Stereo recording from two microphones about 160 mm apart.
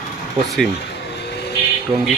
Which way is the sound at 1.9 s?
25° right (ahead or behind).